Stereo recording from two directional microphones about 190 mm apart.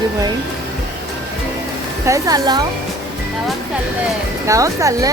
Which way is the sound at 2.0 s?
20° right (ahead or behind).